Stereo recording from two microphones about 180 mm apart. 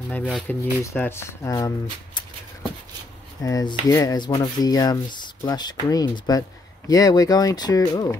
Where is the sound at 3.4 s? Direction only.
20° left (ahead or behind).